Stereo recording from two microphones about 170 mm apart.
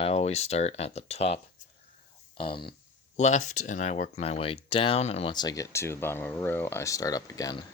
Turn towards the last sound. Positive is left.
turn(degrees=20)  # may be behind; listen again after turning